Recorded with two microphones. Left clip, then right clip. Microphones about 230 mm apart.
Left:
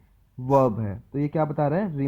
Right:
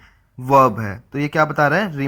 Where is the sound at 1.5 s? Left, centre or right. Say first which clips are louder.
Right 8 dB; right.